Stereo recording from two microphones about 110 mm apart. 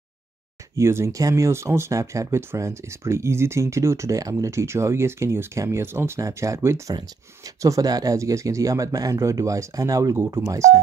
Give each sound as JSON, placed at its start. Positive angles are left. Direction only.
{"t": 0.7, "sound": "speech", "side_deg": -25}